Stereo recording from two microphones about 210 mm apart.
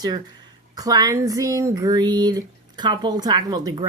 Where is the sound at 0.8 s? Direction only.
15° right (ahead or behind).